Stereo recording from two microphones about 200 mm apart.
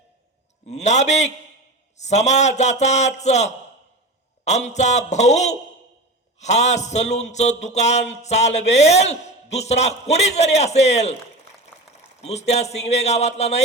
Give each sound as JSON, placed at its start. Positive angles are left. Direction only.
{"t": 0.7, "sound": "a man's voice", "side_deg": 35}
{"t": 12.2, "sound": "a man's voice", "side_deg": 35}